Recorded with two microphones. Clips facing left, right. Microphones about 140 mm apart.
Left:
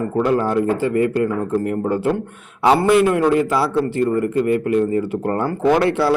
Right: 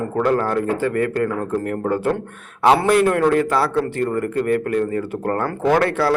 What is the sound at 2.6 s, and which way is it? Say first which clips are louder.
A man's voice: left 1 dB; 5° left (ahead or behind).